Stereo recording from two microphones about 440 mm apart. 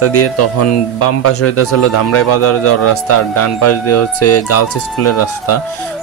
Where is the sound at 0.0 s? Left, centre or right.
Left.